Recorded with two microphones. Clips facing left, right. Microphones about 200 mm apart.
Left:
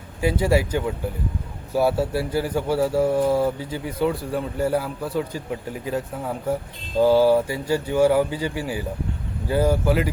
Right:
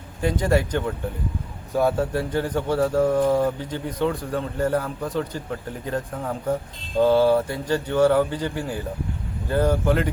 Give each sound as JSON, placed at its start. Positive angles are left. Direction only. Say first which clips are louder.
{"t": 0.2, "sound": "speech", "louder": "left 1 dB", "side_deg": 10}